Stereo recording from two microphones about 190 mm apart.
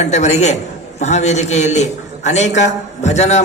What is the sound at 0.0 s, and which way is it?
A man's voice, 35° left (ahead or behind).